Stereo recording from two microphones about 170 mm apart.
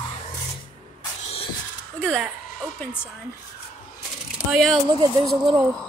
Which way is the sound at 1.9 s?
5° left (ahead or behind).